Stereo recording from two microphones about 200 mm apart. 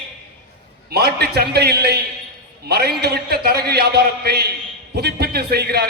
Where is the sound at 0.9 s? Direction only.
50° right (ahead or behind).